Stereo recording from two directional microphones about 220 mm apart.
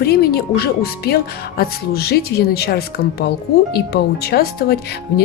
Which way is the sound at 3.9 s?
45° left (ahead or behind).